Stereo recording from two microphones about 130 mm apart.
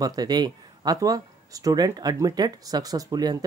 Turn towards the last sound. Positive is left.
turn(degrees=-30)  # may be behind; listen again after turning